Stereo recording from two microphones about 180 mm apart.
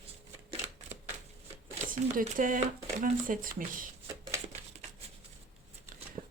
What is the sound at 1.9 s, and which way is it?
Speech, 50° right (ahead or behind).